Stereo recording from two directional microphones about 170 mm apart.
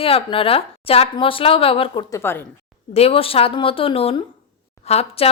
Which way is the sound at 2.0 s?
15° left (ahead or behind).